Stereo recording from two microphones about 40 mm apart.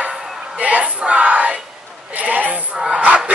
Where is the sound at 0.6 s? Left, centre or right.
Right.